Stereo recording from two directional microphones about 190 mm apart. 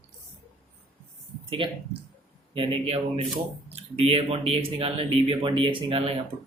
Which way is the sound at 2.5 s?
30° right (ahead or behind).